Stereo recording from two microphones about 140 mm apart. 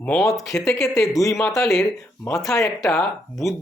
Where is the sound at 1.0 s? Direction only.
25° left (ahead or behind).